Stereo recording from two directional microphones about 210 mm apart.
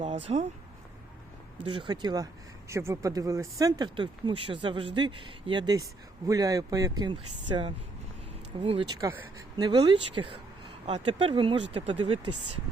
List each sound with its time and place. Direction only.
0.0 s speech: 30° right (ahead or behind)
1.6 s speech: 20° right (ahead or behind)